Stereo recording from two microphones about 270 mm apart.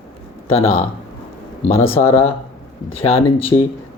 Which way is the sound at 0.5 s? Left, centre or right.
Left.